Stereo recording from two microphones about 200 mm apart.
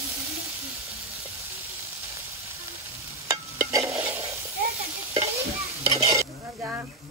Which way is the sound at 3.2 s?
15° right (ahead or behind).